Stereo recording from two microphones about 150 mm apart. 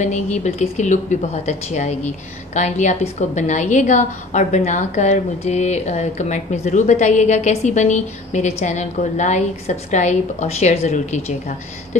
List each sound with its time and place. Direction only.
0.0 s a woman's voice: 50° left (ahead or behind)